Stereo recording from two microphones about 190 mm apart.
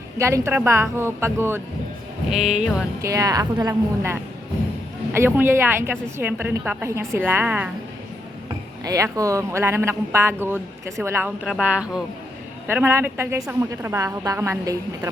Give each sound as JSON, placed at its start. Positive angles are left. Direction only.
{"t": 0.2, "sound": "a woman's voice", "side_deg": -15}
{"t": 2.3, "sound": "speech", "side_deg": 0}
{"t": 3.0, "sound": "a woman's voice", "side_deg": -15}
{"t": 8.8, "sound": "a woman's voice", "side_deg": -15}